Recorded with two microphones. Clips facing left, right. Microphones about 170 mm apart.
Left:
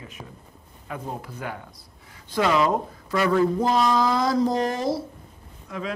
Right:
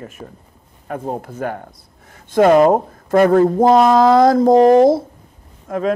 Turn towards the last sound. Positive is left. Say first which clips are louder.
# right 12 dB
turn(degrees=-45)  # may be behind; listen again after turning